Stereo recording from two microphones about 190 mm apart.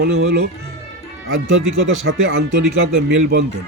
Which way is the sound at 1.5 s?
70° right (ahead or behind).